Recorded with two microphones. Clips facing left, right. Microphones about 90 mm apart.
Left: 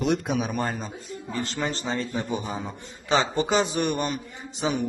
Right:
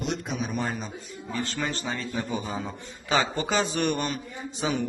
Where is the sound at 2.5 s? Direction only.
15° left (ahead or behind).